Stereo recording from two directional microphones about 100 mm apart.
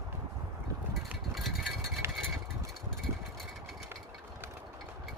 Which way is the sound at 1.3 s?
Centre (ahead or behind).